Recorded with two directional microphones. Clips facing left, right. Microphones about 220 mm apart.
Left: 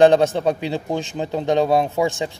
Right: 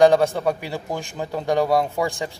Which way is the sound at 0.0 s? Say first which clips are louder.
Left 2 dB; 20° left (ahead or behind).